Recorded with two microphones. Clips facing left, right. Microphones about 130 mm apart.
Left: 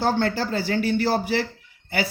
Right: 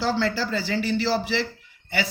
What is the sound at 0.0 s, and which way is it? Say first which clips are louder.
Speech: left 2 dB; 50° left (ahead or behind).